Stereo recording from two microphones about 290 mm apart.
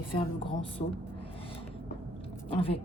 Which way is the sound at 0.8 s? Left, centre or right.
Left.